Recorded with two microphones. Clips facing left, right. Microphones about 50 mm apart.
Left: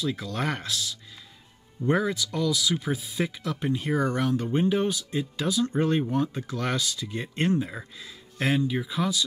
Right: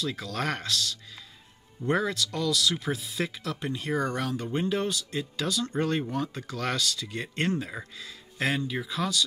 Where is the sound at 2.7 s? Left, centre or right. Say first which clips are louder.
Left 2 dB; centre.